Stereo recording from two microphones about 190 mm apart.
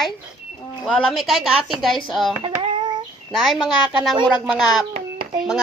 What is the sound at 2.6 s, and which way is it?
Child singing, 25° right (ahead or behind).